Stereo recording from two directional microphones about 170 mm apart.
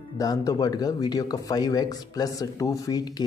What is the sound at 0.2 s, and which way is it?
Speech, 20° left (ahead or behind).